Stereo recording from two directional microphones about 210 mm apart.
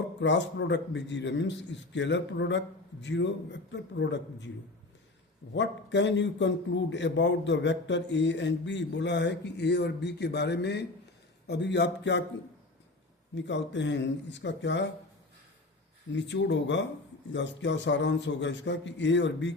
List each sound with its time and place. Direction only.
0.2 s a man's voice: 55° left (ahead or behind)
5.5 s a man's voice: 55° left (ahead or behind)
13.3 s a man's voice: 55° left (ahead or behind)
16.1 s a man's voice: 55° left (ahead or behind)